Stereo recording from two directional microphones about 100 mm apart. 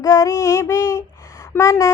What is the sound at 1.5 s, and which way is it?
Speech, 30° left (ahead or behind).